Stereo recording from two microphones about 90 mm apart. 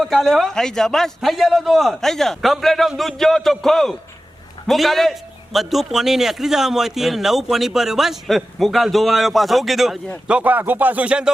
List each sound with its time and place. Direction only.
0.0 s a man's voice: 5° left (ahead or behind)
10.2 s speech: 15° right (ahead or behind)